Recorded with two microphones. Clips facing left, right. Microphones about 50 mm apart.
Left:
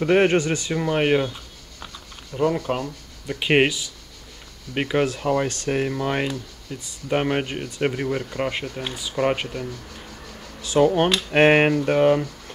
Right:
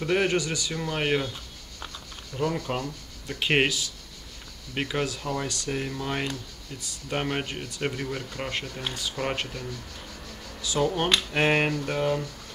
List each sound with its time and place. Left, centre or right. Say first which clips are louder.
0.0 s speech: left 7 dB; left
0.7 s speech: left 7 dB; left
5.0 s speech: left 8 dB; left; by 9.7 s centre
10.6 s speech: left 8 dB; left